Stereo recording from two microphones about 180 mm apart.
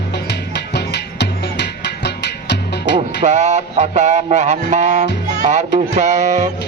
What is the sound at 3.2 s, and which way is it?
Speech, 40° right (ahead or behind).